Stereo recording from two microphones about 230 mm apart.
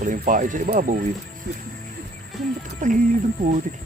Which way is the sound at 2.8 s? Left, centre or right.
Right.